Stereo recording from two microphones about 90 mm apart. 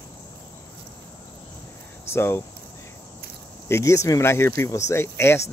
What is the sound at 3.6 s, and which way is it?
Speech, 30° left (ahead or behind).